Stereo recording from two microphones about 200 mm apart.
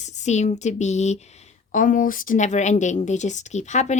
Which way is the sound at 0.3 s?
35° left (ahead or behind).